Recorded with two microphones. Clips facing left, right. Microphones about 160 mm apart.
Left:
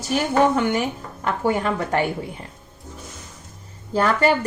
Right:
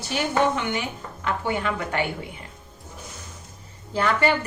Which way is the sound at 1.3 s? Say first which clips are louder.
Left 4 dB; 40° left (ahead or behind).